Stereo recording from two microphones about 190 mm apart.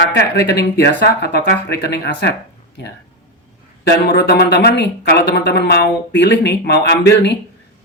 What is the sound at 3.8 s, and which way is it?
Speech, 60° left (ahead or behind).